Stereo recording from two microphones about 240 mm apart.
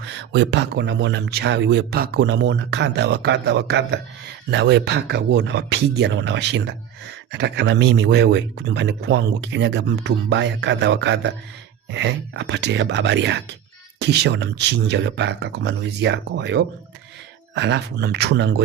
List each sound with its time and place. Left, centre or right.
0.0 s speech: right